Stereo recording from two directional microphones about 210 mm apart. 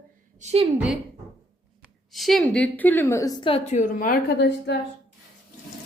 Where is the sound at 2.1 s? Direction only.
Centre (ahead or behind); by 4.8 s 55° left (ahead or behind).